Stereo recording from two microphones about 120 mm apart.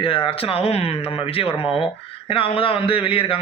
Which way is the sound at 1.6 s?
Centre (ahead or behind).